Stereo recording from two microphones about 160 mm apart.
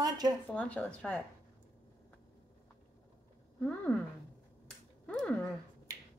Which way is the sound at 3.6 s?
10° left (ahead or behind).